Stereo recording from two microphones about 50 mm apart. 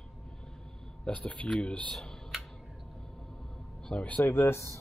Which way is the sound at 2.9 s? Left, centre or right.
Centre.